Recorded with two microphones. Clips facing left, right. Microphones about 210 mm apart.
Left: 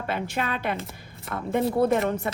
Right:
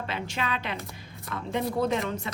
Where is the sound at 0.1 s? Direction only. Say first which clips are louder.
Left 5 dB; 55° left (ahead or behind).